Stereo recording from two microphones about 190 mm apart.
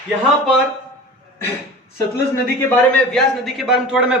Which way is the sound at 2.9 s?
Centre (ahead or behind).